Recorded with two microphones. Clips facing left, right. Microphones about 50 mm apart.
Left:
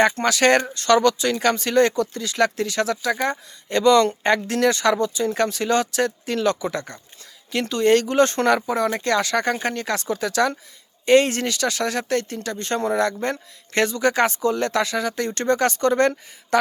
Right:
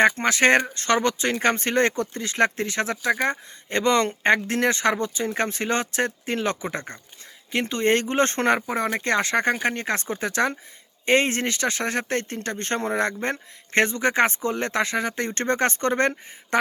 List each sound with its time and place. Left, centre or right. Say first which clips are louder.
0.0 s speech: left 1 dB; right